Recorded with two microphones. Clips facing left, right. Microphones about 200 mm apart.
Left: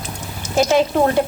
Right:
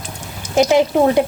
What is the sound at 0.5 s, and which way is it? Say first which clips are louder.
Speech: right 2 dB; 20° right (ahead or behind).